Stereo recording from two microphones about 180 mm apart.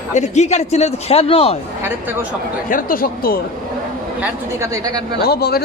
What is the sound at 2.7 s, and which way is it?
Speech, 50° left (ahead or behind).